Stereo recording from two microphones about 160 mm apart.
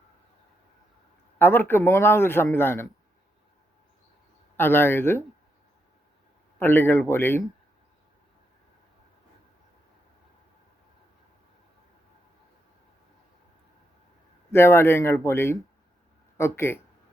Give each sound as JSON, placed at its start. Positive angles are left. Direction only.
{"t": 1.4, "sound": "a man's voice", "side_deg": 15}
{"t": 4.5, "sound": "a man's voice", "side_deg": 15}
{"t": 6.6, "sound": "a man's voice", "side_deg": 15}
{"t": 14.5, "sound": "a man's voice", "side_deg": 15}